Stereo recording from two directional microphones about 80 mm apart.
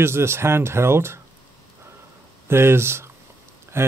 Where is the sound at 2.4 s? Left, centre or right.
Right.